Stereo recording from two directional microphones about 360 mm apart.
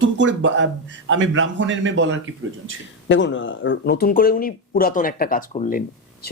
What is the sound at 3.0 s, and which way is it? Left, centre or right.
Speech, left.